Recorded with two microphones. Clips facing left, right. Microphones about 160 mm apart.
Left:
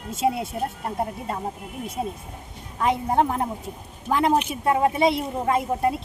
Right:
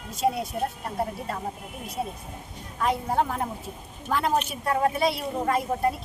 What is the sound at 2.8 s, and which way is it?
Speech, 20° left (ahead or behind).